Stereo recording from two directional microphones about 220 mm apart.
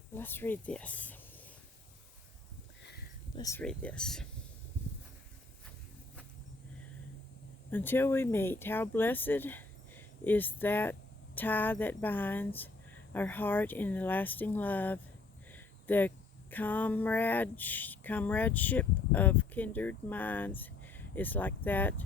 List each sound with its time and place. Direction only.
0.1 s speech: 10° left (ahead or behind)
2.8 s a sound: 45° left (ahead or behind)
3.3 s speech: 15° left (ahead or behind)
3.6 s speech: 5° left (ahead or behind)
7.7 s speech: 10° left (ahead or behind)